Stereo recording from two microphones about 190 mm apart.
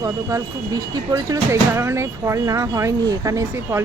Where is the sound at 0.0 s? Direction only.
20° right (ahead or behind).